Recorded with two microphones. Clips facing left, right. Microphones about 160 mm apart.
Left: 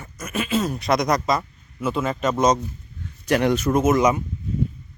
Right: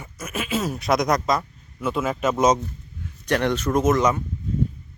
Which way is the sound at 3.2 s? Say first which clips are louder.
Left 3 dB; 10° left (ahead or behind).